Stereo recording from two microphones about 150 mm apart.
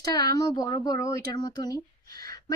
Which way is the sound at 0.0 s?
25° left (ahead or behind).